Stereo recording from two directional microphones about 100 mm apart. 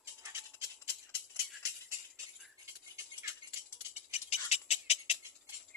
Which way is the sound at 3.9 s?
90° left.